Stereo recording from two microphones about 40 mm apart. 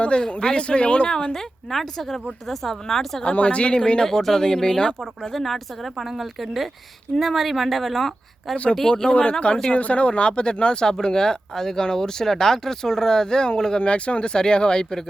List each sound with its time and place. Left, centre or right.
0.0 s speech: left
1.3 s speech: centre
3.2 s speech: left
5.3 s speech: centre
8.9 s speech: centre
9.7 s speech: left; by 13.7 s centre
13.7 s speech: left